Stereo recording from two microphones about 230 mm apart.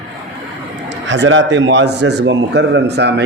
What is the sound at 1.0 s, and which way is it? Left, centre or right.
A man's voice, right.